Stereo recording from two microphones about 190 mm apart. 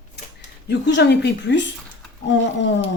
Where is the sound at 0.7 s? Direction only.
65° left (ahead or behind).